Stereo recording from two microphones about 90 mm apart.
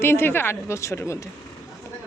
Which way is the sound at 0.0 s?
25° left (ahead or behind).